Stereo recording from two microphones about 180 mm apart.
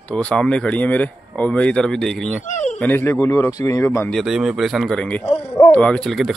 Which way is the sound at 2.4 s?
45° left (ahead or behind).